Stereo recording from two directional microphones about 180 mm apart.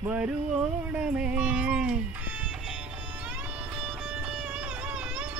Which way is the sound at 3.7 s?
Centre (ahead or behind).